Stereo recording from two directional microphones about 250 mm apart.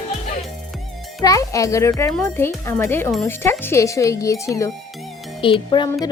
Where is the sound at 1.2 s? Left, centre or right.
Centre.